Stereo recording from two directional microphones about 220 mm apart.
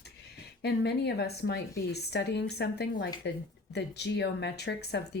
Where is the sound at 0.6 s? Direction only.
50° left (ahead or behind).